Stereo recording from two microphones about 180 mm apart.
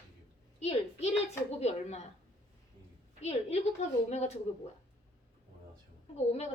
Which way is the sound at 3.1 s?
35° left (ahead or behind).